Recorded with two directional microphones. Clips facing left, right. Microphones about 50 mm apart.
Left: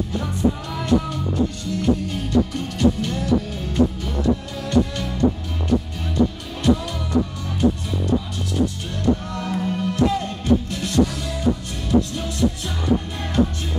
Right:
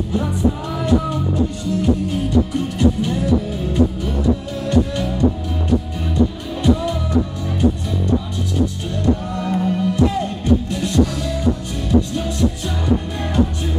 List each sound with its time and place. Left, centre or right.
0.2 s music: centre
6.5 s music: centre
8.9 s music: centre